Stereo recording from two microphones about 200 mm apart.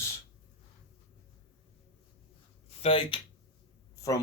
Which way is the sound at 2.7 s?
30° left (ahead or behind).